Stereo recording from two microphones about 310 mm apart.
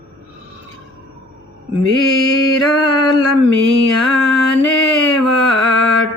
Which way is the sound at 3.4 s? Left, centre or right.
Right.